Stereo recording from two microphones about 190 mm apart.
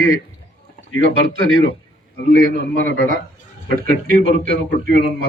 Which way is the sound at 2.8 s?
50° right (ahead or behind).